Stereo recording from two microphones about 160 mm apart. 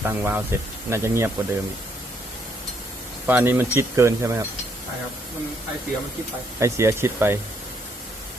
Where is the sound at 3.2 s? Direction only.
10° right (ahead or behind).